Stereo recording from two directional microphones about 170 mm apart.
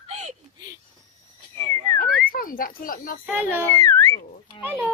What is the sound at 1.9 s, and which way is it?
Speech, 55° left (ahead or behind).